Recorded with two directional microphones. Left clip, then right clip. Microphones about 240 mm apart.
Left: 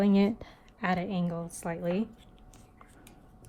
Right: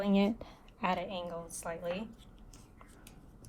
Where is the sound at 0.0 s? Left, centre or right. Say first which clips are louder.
Left 4 dB; left.